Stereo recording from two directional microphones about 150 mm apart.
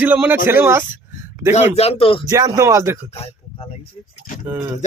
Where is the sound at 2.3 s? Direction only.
20° right (ahead or behind).